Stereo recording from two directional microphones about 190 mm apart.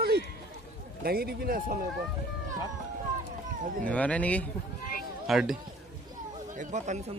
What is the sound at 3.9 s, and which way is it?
Speech, 5° left (ahead or behind).